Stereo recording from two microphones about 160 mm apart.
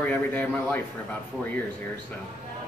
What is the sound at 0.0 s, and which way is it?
Speech, 10° left (ahead or behind).